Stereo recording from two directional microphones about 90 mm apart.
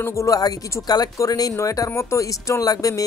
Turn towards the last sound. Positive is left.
turn(degrees=40)  # may be behind; listen again after turning